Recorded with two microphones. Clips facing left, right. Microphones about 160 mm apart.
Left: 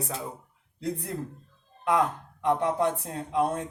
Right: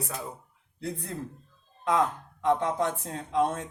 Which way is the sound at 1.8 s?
15° left (ahead or behind).